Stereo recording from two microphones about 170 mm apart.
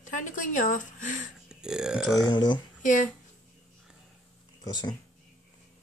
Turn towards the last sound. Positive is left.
turn(degrees=25)  # may be behind; listen again after turning